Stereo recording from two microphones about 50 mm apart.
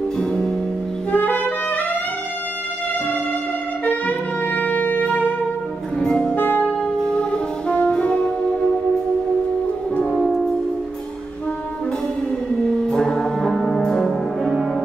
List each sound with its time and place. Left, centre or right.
0.2 s music: centre
1.1 s saxophone: left
3.8 s saxophone: left
5.9 s music: centre
6.3 s music: left
7.0 s music: centre
10.1 s music: centre
12.6 s music: centre